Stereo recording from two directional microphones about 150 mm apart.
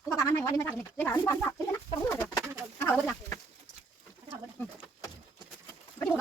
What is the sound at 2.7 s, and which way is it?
Bird, 10° left (ahead or behind).